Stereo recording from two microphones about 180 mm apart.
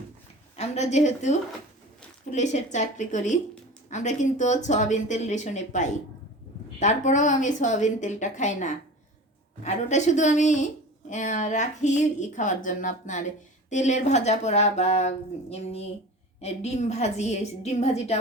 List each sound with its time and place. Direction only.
0.5 s a woman's voice: 35° left (ahead or behind)